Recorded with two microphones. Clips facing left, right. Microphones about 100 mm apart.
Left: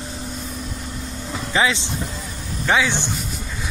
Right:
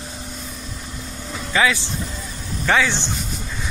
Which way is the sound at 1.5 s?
25° left (ahead or behind).